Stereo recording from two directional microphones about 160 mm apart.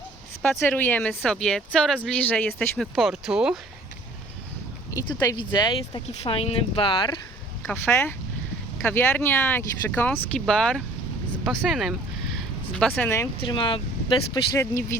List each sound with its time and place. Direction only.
0.5 s speech: 10° left (ahead or behind)
5.0 s speech: 25° left (ahead or behind)
7.7 s speech: 15° left (ahead or behind)
13.5 s speech: 30° left (ahead or behind)
14.5 s speech: 15° left (ahead or behind)